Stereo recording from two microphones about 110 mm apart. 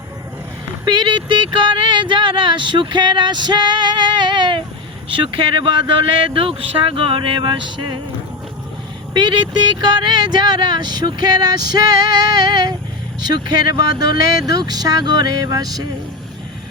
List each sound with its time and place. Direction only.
0.9 s speech: 40° right (ahead or behind)
9.1 s speech: 40° right (ahead or behind)